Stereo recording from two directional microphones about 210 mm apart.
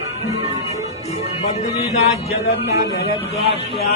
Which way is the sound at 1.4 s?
30° left (ahead or behind).